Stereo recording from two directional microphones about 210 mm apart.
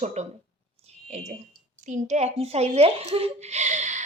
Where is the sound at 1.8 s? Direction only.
35° right (ahead or behind).